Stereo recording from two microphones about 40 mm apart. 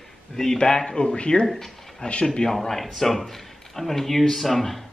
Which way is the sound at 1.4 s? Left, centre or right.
Centre.